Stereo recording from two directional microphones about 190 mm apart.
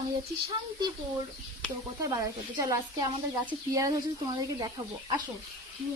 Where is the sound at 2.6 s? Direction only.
20° right (ahead or behind).